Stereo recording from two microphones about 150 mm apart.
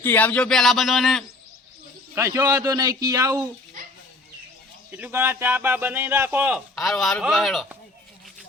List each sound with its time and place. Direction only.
0.0 s speech: 10° left (ahead or behind)
2.1 s a man's voice: 20° right (ahead or behind)
4.9 s speech: 10° right (ahead or behind)
6.7 s speech: centre (ahead or behind)